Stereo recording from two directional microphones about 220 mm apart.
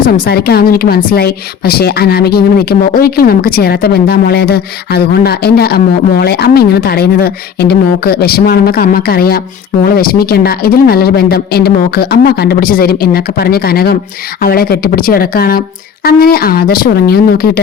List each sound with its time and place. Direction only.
0.0 s a woman's voice: 45° left (ahead or behind)